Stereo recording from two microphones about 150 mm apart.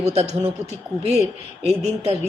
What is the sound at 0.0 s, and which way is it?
Speech, 45° right (ahead or behind).